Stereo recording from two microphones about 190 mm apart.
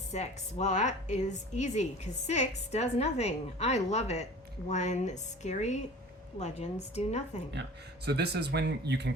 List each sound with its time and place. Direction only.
0.1 s a woman's voice: 35° left (ahead or behind)
7.5 s speech: 65° right (ahead or behind)